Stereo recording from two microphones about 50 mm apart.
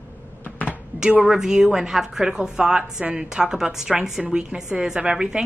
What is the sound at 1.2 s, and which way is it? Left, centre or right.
A woman's voice, centre.